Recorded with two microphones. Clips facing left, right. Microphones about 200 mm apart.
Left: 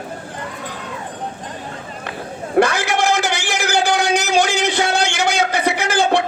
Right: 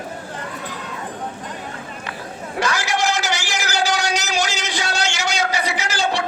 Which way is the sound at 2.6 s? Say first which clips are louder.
Left 6 dB; 55° left (ahead or behind).